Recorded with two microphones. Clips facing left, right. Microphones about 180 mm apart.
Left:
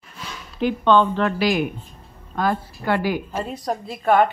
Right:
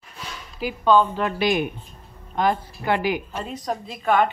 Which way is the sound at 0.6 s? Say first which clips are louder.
Left 1 dB; 5° right (ahead or behind).